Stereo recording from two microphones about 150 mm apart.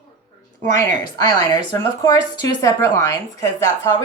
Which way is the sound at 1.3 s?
25° left (ahead or behind).